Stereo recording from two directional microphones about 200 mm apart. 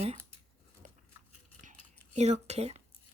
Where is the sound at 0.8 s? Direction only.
40° right (ahead or behind).